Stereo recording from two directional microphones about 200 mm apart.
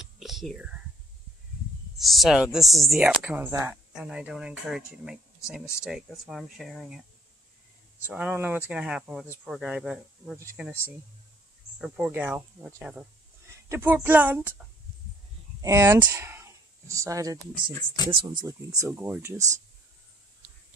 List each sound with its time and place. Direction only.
0.0 s whispering: centre (ahead or behind)
2.0 s speech: centre (ahead or behind)
8.1 s speech: 5° right (ahead or behind)
11.8 s speech: 10° right (ahead or behind)
15.6 s speech: 15° right (ahead or behind)
18.9 s speech: 10° right (ahead or behind)